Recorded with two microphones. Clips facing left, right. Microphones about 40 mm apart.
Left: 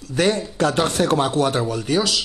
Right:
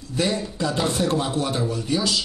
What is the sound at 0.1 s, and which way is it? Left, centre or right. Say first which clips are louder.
A man's voice: left 4 dB; left.